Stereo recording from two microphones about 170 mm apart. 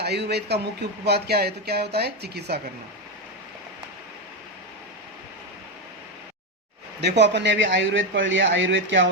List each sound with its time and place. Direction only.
0.0 s speech: 75° right (ahead or behind)
7.0 s speech: 90° right